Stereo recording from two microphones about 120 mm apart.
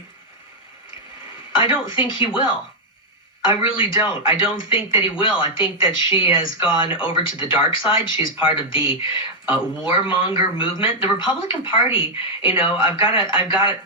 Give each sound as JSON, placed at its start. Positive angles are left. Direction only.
{"t": 1.8, "sound": "speech", "side_deg": 45}